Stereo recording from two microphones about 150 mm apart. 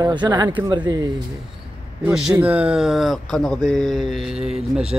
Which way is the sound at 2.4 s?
10° right (ahead or behind).